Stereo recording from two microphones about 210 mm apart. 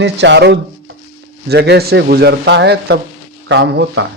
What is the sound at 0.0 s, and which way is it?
Speech, 55° right (ahead or behind).